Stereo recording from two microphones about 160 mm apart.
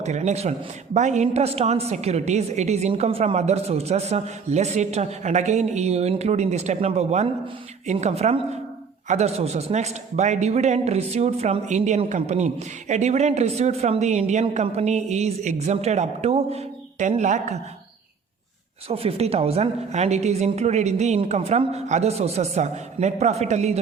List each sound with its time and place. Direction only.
0.0 s a man's voice: 45° right (ahead or behind)
18.9 s a man's voice: 40° right (ahead or behind)